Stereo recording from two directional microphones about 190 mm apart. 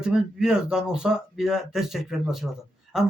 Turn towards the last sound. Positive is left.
turn(degrees=0)  # may be behind; listen again after turning